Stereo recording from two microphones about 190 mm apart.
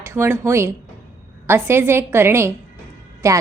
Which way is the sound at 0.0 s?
15° right (ahead or behind).